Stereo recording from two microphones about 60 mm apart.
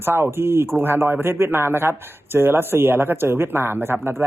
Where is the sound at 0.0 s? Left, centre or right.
Right.